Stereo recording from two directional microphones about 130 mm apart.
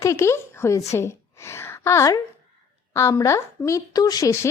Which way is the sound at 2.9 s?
20° left (ahead or behind).